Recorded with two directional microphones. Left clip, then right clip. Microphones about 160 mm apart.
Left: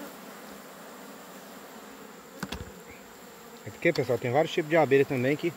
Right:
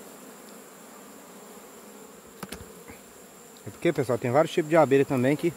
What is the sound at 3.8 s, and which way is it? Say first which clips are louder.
Speech: even; 30° right (ahead or behind).